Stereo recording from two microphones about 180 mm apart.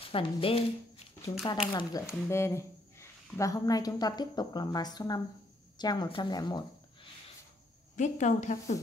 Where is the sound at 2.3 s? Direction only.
15° left (ahead or behind).